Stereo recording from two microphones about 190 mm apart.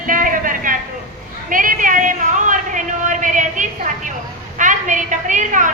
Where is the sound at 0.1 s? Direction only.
45° right (ahead or behind).